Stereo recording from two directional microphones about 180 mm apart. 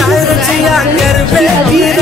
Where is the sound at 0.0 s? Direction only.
Centre (ahead or behind).